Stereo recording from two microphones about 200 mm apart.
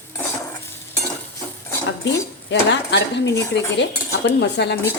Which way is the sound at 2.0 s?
60° left (ahead or behind).